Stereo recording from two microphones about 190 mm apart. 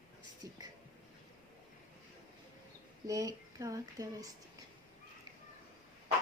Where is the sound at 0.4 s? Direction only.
20° right (ahead or behind).